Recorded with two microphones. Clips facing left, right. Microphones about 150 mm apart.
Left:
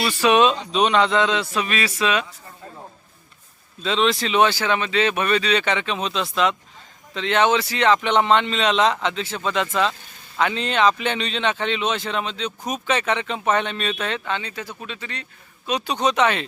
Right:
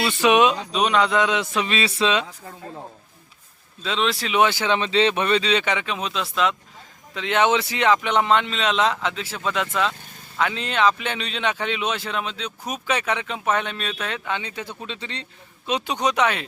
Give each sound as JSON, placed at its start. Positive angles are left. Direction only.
{"t": 0.0, "sound": "speech", "side_deg": -20}
{"t": 0.5, "sound": "speech", "side_deg": -5}
{"t": 3.8, "sound": "speech", "side_deg": 0}
{"t": 7.1, "sound": "speech", "side_deg": -10}
{"t": 14.3, "sound": "speech", "side_deg": -15}